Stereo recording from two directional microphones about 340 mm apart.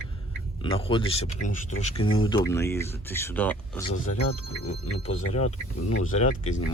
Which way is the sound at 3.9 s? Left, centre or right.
Left.